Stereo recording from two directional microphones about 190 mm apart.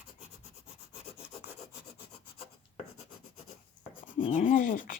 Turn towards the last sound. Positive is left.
turn(degrees=45)  # may be behind; listen again after turning